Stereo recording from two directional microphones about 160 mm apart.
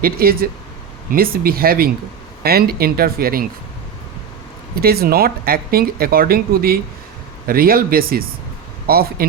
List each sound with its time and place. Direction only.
0.0 s speech: 70° right (ahead or behind)
4.7 s speech: 70° right (ahead or behind)